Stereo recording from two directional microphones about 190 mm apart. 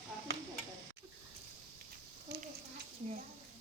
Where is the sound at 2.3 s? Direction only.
60° right (ahead or behind).